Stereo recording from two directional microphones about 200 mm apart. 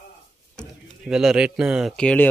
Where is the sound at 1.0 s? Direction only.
5° right (ahead or behind).